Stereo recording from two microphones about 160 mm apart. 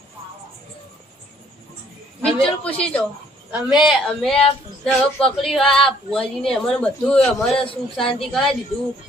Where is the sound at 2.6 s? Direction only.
10° left (ahead or behind).